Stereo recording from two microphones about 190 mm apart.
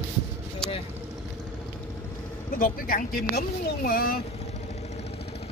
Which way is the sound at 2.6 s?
45° left (ahead or behind).